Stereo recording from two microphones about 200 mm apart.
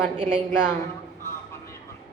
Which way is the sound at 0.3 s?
5° right (ahead or behind).